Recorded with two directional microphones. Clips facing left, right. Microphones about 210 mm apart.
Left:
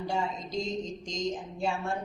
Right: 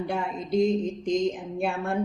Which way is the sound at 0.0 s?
55° right (ahead or behind).